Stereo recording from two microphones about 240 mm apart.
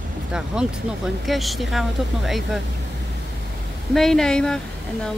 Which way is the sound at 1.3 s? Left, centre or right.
Centre.